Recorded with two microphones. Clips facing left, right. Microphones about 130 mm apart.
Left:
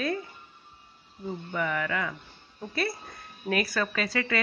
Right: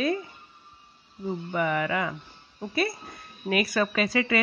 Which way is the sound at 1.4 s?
15° right (ahead or behind).